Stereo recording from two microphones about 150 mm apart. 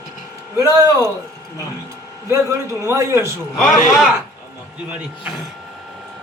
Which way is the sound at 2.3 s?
20° right (ahead or behind).